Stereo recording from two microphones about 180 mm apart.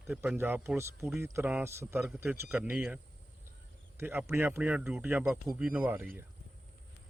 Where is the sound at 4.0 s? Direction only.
10° right (ahead or behind).